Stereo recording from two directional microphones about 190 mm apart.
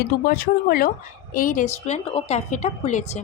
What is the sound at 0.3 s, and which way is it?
Speech, 50° left (ahead or behind).